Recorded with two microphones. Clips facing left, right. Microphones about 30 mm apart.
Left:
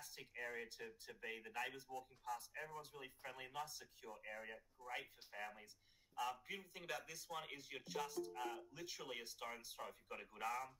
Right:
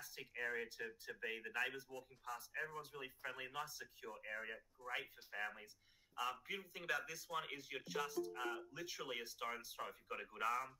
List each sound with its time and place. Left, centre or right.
0.0 s a sound: centre
0.3 s a man's voice: centre
3.6 s speech: centre
4.1 s a man's voice: centre
7.5 s speech: centre
8.4 s a man's voice: centre